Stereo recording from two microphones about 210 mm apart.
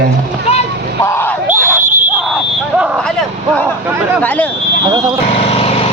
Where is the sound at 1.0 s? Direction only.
10° left (ahead or behind).